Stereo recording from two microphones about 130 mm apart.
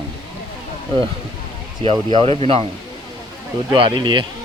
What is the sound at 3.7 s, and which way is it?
Speech, 35° right (ahead or behind).